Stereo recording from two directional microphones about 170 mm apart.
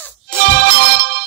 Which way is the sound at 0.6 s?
80° right.